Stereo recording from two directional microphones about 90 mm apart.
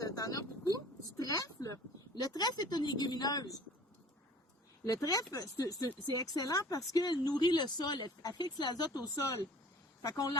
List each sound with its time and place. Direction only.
0.0 s a sound: 40° left (ahead or behind)
2.1 s speech: 45° left (ahead or behind)
4.9 s speech: 40° left (ahead or behind)